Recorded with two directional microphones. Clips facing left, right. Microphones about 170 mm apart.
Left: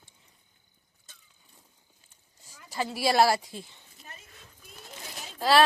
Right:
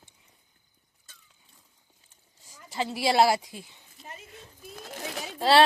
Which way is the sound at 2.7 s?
20° right (ahead or behind).